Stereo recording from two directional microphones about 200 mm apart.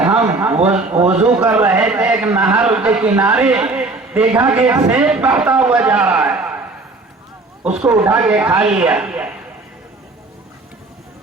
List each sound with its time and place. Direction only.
0.2 s a sound: 10° right (ahead or behind)
1.0 s a man's voice: 5° right (ahead or behind)
7.6 s a man's voice: 5° right (ahead or behind)